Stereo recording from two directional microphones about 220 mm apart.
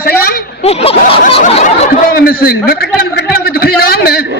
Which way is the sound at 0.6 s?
25° left (ahead or behind).